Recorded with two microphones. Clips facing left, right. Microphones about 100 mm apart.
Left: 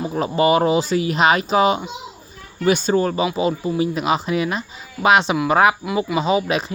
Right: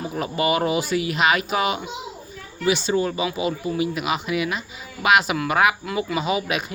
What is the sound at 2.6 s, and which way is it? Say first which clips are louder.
Speech: left 4 dB; 45° left (ahead or behind).